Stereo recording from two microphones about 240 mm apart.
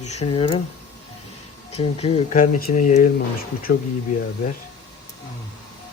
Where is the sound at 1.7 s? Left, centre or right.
Left.